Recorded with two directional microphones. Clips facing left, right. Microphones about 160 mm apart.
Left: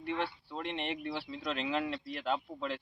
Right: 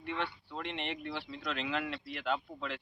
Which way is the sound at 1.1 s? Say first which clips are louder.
Left 2 dB; 35° left (ahead or behind).